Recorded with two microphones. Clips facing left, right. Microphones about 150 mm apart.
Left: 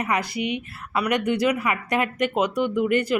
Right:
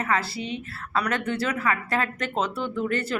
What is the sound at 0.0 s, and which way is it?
Speech, 15° left (ahead or behind).